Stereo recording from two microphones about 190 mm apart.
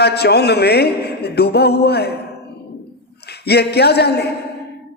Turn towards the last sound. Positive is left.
turn(degrees=60)  # may be behind; listen again after turning